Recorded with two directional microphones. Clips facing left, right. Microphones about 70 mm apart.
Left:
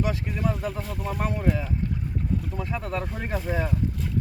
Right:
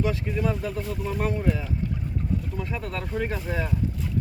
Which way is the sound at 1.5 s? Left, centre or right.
Left.